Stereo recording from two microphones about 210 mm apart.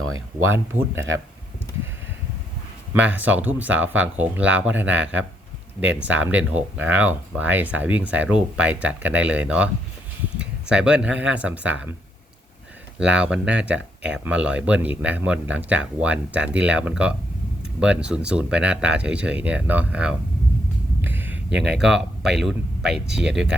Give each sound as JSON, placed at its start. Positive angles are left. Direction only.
{"t": 0.1, "sound": "speech", "side_deg": -75}
{"t": 0.5, "sound": "speech", "side_deg": -10}
{"t": 2.9, "sound": "speech", "side_deg": -5}
{"t": 13.0, "sound": "speech", "side_deg": -5}
{"t": 21.0, "sound": "a sound", "side_deg": -10}
{"t": 21.5, "sound": "speech", "side_deg": -50}
{"t": 21.8, "sound": "speech", "side_deg": -5}